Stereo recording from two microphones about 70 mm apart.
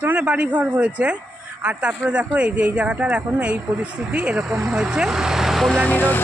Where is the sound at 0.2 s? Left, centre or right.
Centre.